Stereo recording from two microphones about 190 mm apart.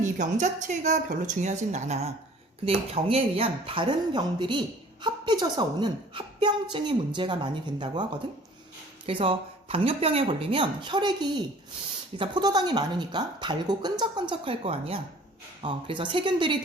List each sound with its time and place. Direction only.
0.0 s a woman's voice: 40° right (ahead or behind); by 8.0 s 25° right (ahead or behind)
9.0 s a woman's voice: 30° right (ahead or behind)